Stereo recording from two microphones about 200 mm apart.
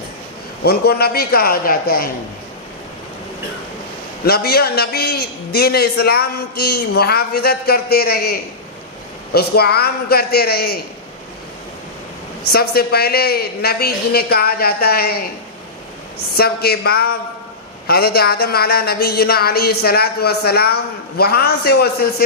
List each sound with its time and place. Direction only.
0.6 s speech: 55° left (ahead or behind)
4.3 s speech: 50° left (ahead or behind)
12.5 s speech: 50° left (ahead or behind)
16.3 s speech: 50° left (ahead or behind)